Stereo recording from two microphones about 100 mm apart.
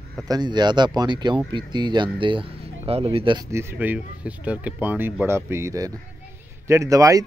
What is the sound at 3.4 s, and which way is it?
Speech, 25° right (ahead or behind).